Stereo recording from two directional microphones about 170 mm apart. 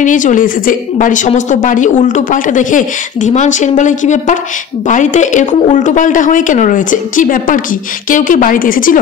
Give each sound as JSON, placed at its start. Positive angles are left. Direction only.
{"t": 0.0, "sound": "a woman's voice", "side_deg": 50}